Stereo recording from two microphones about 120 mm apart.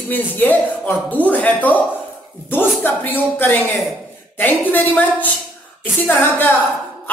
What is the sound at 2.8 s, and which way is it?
A woman's voice, 15° left (ahead or behind).